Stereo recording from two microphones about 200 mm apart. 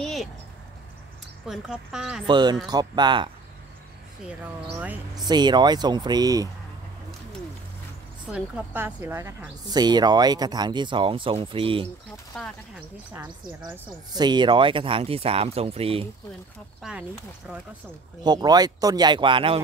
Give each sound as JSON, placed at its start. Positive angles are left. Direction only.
{"t": 0.0, "sound": "a sound", "side_deg": 0}
{"t": 1.5, "sound": "speech", "side_deg": -5}
{"t": 2.2, "sound": "a woman's voice", "side_deg": -20}
{"t": 4.3, "sound": "speech", "side_deg": -10}
{"t": 5.1, "sound": "a woman's voice", "side_deg": -20}
{"t": 8.3, "sound": "a woman's voice", "side_deg": -5}
{"t": 12.3, "sound": "speech", "side_deg": 5}
{"t": 14.1, "sound": "a woman's voice", "side_deg": -20}
{"t": 16.8, "sound": "speech", "side_deg": -5}
{"t": 18.2, "sound": "a woman's voice", "side_deg": -20}